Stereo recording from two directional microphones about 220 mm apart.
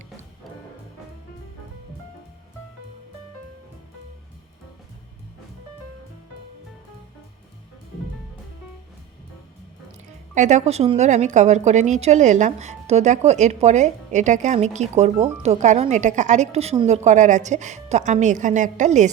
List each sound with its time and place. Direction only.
10.3 s a woman's voice: 35° right (ahead or behind)